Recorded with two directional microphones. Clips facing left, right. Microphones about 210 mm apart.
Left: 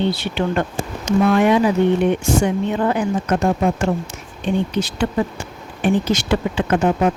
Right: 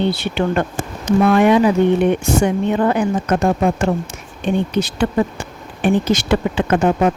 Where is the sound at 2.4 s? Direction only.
60° right (ahead or behind).